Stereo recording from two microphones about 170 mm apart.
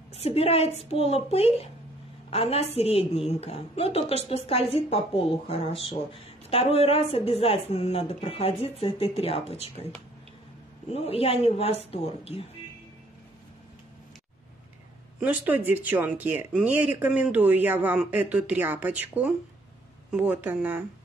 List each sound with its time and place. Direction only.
0.1 s speech: 35° left (ahead or behind)
10.9 s speech: 35° left (ahead or behind)
15.1 s speech: 10° right (ahead or behind)